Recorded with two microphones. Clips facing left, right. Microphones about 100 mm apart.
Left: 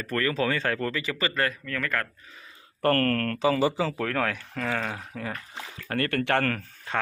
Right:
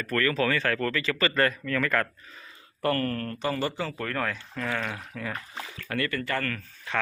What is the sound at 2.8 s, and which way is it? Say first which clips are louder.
Speech: left 4 dB; 65° left (ahead or behind).